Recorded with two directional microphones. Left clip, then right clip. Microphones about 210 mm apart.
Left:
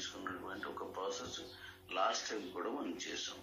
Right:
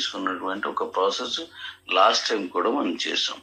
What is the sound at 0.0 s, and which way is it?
Speech, 50° right (ahead or behind).